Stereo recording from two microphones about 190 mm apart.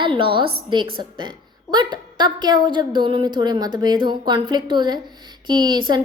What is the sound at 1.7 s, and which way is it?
A woman's voice, 25° right (ahead or behind).